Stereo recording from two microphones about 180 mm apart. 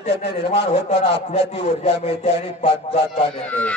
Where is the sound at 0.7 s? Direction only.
35° left (ahead or behind).